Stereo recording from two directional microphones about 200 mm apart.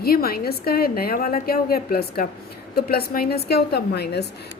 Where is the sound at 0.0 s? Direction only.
50° left (ahead or behind).